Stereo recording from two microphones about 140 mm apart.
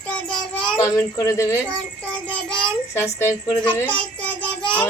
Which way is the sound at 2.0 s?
5° left (ahead or behind).